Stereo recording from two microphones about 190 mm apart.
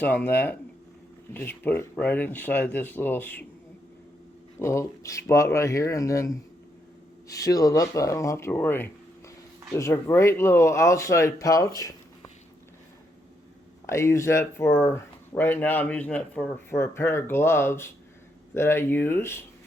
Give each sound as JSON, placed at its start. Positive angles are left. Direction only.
{"t": 0.0, "sound": "speech", "side_deg": 10}
{"t": 4.6, "sound": "speech", "side_deg": 15}
{"t": 13.8, "sound": "speech", "side_deg": 15}